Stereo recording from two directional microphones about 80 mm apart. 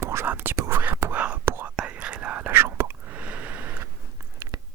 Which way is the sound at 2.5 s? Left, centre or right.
Right.